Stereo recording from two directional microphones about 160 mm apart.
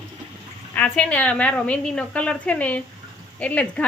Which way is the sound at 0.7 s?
10° left (ahead or behind).